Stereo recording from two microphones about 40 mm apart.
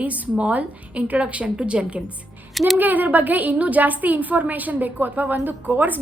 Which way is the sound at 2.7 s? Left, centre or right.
Right.